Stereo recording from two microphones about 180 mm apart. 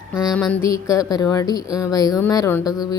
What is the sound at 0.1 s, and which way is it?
Mantra, 5° right (ahead or behind).